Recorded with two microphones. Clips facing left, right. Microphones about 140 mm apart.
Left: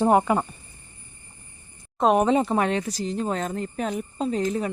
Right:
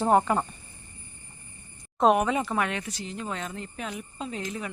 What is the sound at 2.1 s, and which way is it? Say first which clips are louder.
A woman's voice: left 5 dB; 30° left (ahead or behind).